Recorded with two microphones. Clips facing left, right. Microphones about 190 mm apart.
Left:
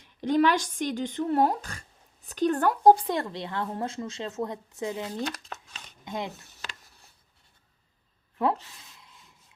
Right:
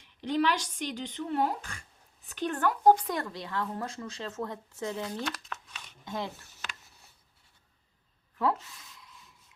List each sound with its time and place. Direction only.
0.0 s speech: 50° left (ahead or behind); by 5.0 s 15° left (ahead or behind)
5.0 s speech: 25° left (ahead or behind)